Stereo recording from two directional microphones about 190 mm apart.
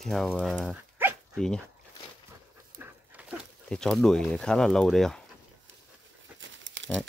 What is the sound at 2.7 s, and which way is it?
Dog, 10° right (ahead or behind).